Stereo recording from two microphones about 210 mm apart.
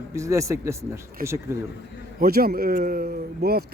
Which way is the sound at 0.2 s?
15° right (ahead or behind).